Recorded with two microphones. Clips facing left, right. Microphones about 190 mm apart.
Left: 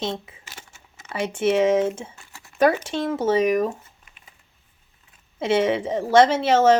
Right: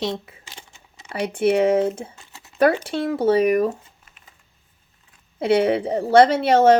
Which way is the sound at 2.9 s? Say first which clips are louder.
Right 3 dB; 60° right (ahead or behind).